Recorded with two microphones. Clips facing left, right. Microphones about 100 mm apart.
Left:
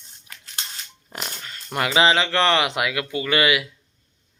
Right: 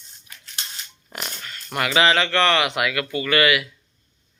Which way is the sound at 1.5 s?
25° left (ahead or behind).